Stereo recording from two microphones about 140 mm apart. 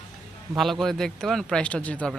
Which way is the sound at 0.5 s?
Centre (ahead or behind).